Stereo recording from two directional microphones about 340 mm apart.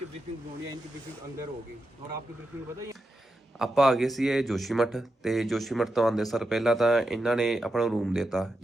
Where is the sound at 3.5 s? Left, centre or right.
Centre.